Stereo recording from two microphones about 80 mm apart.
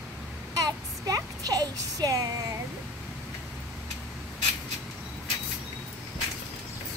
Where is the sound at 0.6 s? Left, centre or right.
Right.